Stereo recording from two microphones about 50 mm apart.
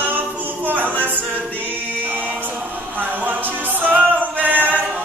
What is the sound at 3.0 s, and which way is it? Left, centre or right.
A capella, right.